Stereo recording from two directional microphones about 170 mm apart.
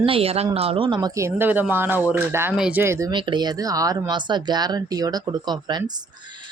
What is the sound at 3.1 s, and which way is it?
Speech, 30° right (ahead or behind).